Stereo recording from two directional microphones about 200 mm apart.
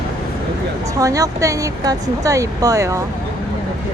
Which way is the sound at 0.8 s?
15° right (ahead or behind).